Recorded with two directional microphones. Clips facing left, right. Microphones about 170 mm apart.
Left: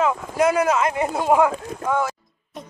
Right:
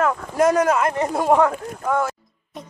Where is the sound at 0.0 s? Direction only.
5° left (ahead or behind).